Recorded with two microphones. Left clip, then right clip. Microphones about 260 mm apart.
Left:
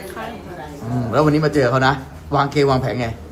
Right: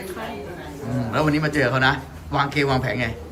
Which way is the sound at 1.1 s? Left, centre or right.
Left.